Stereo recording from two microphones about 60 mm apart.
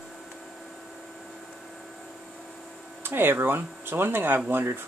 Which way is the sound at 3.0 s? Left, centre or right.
Right.